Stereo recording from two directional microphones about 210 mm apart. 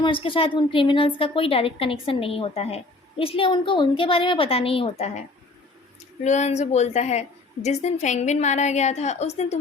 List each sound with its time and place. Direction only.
0.0 s a woman's voice: 25° left (ahead or behind)
6.2 s a woman's voice: 35° left (ahead or behind)